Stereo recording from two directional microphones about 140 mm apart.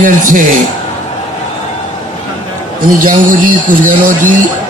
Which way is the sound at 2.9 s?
75° right (ahead or behind).